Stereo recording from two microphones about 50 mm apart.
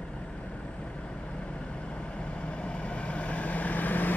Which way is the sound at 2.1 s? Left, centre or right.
Left.